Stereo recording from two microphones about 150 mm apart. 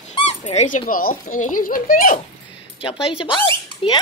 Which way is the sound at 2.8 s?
35° left (ahead or behind).